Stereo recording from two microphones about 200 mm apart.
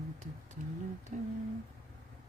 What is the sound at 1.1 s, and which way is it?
Humming, 40° right (ahead or behind).